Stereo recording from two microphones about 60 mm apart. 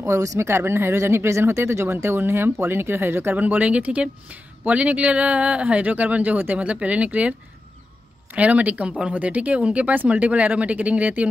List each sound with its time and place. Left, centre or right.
0.0 s speech: right
3.3 s speech: right